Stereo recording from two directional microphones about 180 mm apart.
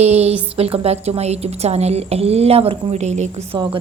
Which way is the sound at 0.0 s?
35° right (ahead or behind).